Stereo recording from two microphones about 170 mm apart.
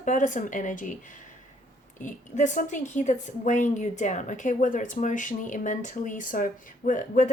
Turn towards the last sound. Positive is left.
turn(degrees=50)  # may be behind; listen again after turning